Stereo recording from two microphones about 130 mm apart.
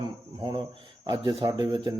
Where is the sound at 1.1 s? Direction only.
35° right (ahead or behind).